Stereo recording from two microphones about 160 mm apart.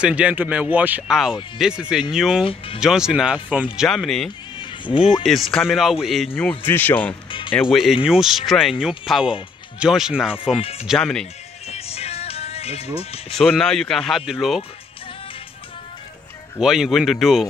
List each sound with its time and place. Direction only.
0.0 s speech: 10° right (ahead or behind)
2.4 s speech: 35° left (ahead or behind)
2.8 s speech: 5° right (ahead or behind)
4.6 s music: 30° left (ahead or behind)
5.2 s speech: centre (ahead or behind)
6.6 s speech: 10° left (ahead or behind)
7.2 s music: 30° left (ahead or behind)
7.7 s speech: centre (ahead or behind)
10.6 s speech: 40° left (ahead or behind)
10.9 s speech: 5° left (ahead or behind)
11.6 s music: 40° left (ahead or behind)
13.4 s speech: 5° left (ahead or behind)
16.5 s speech: 5° right (ahead or behind)